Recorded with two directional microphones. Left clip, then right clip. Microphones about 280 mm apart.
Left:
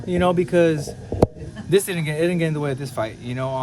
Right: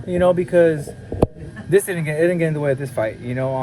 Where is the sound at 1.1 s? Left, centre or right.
Right.